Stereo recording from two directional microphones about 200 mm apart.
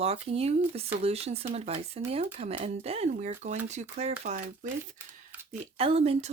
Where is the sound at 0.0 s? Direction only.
30° right (ahead or behind).